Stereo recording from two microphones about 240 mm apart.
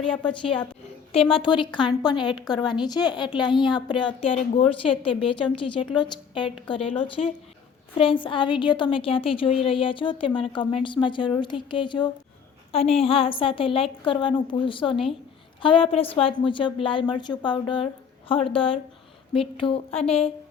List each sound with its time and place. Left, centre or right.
1.1 s speech: left